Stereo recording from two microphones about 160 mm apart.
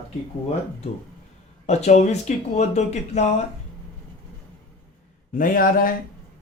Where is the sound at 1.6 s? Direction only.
45° left (ahead or behind).